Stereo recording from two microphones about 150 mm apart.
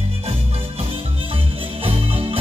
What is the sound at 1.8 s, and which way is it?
Music, 40° right (ahead or behind).